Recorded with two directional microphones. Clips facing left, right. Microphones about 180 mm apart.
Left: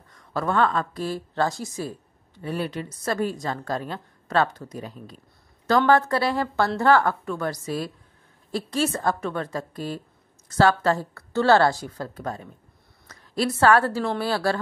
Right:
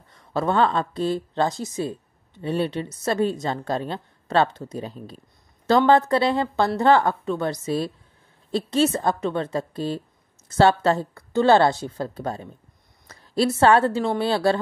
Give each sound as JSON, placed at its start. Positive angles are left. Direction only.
{"t": 0.3, "sound": "a woman's voice", "side_deg": -25}
{"t": 5.7, "sound": "a woman's voice", "side_deg": -20}